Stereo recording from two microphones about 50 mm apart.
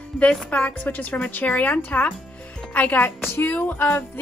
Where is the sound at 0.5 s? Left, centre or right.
Left.